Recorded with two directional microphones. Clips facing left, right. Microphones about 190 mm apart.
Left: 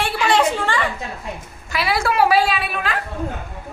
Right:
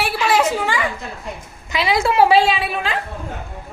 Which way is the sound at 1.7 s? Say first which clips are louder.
Right 2 dB; 20° right (ahead or behind).